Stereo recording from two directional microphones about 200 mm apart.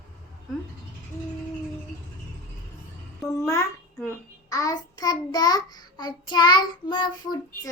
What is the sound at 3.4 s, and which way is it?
Speech, 15° left (ahead or behind).